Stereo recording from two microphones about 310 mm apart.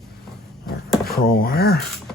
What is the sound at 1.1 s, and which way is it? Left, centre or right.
Speech, left.